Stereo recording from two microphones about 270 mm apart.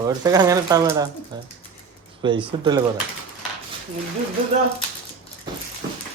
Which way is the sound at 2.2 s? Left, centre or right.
Centre.